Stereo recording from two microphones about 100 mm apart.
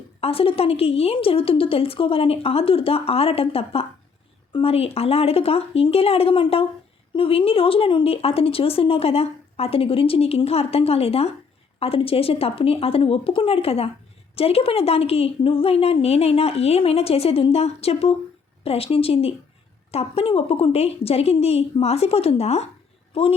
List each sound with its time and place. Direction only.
0.2 s a woman's voice: 75° left (ahead or behind)
11.8 s a woman's voice: 70° left (ahead or behind); by 18.1 s 85° left
18.6 s a woman's voice: 75° left (ahead or behind)